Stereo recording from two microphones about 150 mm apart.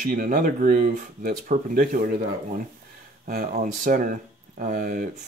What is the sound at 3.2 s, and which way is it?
Speech, 75° right (ahead or behind).